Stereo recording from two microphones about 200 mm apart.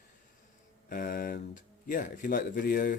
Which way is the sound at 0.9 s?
45° left (ahead or behind).